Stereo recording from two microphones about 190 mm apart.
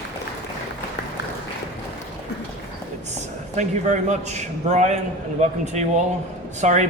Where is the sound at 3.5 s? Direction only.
40° right (ahead or behind).